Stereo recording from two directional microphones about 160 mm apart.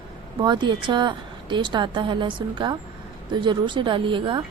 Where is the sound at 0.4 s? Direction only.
30° right (ahead or behind).